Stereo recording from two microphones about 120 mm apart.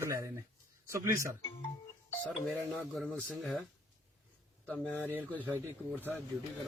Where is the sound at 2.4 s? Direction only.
5° left (ahead or behind).